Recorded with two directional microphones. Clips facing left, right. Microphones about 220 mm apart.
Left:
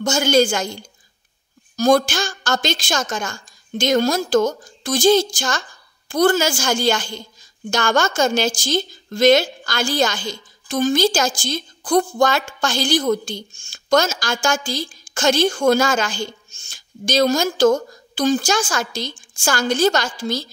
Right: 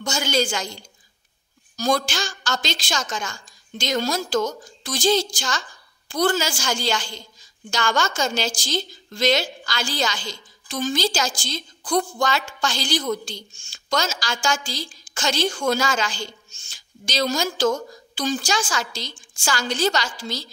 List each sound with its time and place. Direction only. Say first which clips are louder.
0.0 s a woman's voice: left 7 dB; 50° left (ahead or behind)